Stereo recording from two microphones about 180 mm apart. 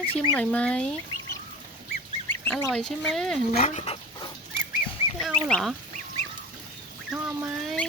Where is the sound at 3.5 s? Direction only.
40° left (ahead or behind).